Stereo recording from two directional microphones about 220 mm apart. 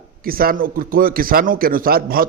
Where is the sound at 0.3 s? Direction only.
40° right (ahead or behind).